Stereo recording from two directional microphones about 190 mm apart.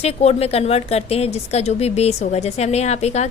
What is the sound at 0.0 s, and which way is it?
A woman's voice, 35° left (ahead or behind).